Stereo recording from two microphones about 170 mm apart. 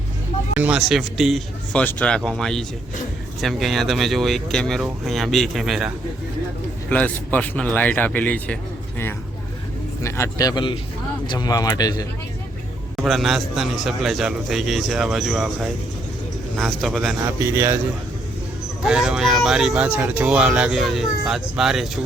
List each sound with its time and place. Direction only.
0.5 s speech: 10° right (ahead or behind)
6.9 s speech: 10° left (ahead or behind)
10.0 s a man's voice: 15° left (ahead or behind)
13.0 s speech: centre (ahead or behind)
17.4 s a man's voice: 15° right (ahead or behind)
18.9 s speech: 5° right (ahead or behind)